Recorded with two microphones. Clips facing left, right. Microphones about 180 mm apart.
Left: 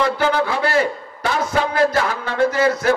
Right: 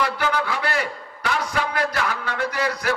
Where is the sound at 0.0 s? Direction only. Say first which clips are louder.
Left 5 dB; 25° left (ahead or behind).